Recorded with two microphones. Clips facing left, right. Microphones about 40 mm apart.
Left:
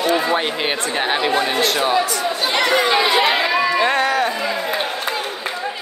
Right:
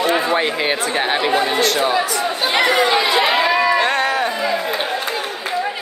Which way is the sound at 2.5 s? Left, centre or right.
Centre.